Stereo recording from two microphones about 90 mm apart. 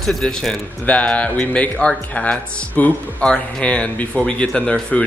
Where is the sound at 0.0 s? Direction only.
5° left (ahead or behind).